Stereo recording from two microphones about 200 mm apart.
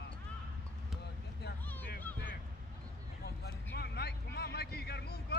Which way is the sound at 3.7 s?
55° left (ahead or behind).